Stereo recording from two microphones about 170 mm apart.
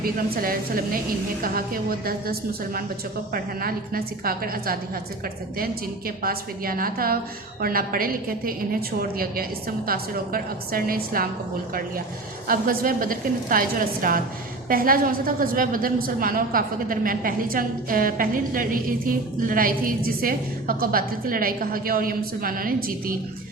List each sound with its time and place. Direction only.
0.0 s a woman's voice: 60° right (ahead or behind)
6.1 s a woman's voice: 60° right (ahead or behind)
12.5 s a woman's voice: 55° right (ahead or behind)